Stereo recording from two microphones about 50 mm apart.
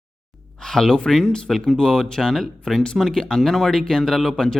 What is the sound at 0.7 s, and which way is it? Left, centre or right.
Speech, centre.